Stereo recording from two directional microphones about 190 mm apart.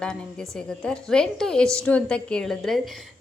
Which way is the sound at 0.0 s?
5° left (ahead or behind).